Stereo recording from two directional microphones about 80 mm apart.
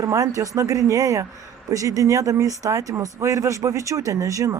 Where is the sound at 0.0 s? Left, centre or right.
Right.